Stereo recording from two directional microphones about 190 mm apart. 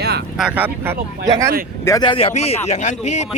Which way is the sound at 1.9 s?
20° left (ahead or behind).